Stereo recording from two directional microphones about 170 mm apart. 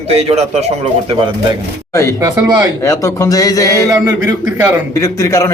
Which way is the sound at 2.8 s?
20° left (ahead or behind).